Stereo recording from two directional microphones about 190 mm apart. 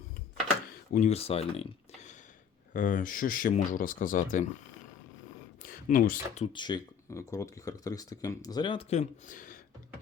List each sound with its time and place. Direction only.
0.9 s speech: 35° left (ahead or behind)
5.6 s speech: 45° left (ahead or behind)
6.4 s speech: 25° left (ahead or behind); by 9.6 s 45° left (ahead or behind)